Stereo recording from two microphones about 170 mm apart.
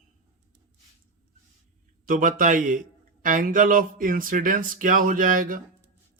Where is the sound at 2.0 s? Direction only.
50° right (ahead or behind).